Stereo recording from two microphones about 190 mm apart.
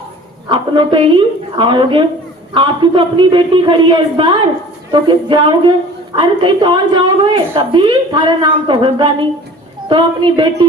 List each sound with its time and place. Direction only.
0.4 s a man's voice: 25° right (ahead or behind)